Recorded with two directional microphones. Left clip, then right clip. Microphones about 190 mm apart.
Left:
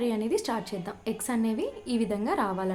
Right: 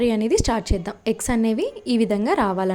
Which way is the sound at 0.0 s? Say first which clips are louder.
Right 8 dB; 40° right (ahead or behind).